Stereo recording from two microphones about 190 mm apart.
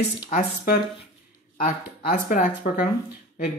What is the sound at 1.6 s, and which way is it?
Speech, 45° left (ahead or behind).